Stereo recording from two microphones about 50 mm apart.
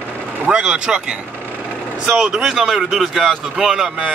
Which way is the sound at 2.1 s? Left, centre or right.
Centre.